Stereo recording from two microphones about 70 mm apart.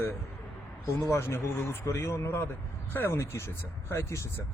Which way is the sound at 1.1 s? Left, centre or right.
Left.